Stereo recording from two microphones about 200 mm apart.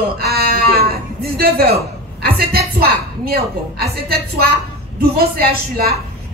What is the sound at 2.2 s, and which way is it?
A woman's voice, 50° right (ahead or behind).